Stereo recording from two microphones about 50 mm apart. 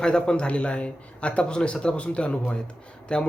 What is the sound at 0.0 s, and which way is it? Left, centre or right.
A man's voice, centre.